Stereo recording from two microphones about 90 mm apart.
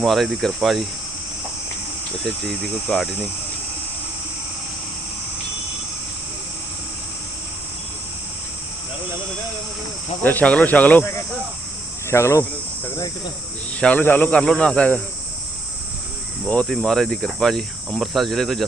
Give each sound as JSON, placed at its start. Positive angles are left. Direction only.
{"t": 0.0, "sound": "speech", "side_deg": 0}
{"t": 2.2, "sound": "speech", "side_deg": 5}
{"t": 10.2, "sound": "cricket", "side_deg": 15}
{"t": 12.1, "sound": "cricket", "side_deg": 35}
{"t": 13.7, "sound": "cricket", "side_deg": 15}
{"t": 16.6, "sound": "speech", "side_deg": 5}